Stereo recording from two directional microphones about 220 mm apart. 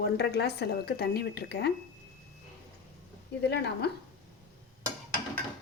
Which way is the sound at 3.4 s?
50° left (ahead or behind).